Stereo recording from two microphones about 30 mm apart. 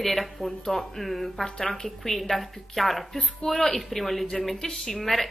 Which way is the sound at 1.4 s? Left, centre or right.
Left.